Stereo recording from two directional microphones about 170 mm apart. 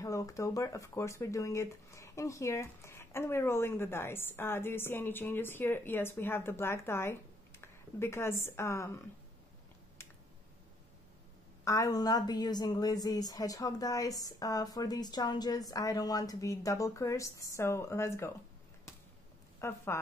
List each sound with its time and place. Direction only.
0.0 s speech: 20° left (ahead or behind)
11.6 s a woman's voice: 20° left (ahead or behind)
19.6 s speech: 15° left (ahead or behind)